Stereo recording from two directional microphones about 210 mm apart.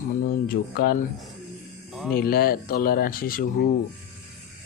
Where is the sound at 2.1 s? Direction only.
45° left (ahead or behind).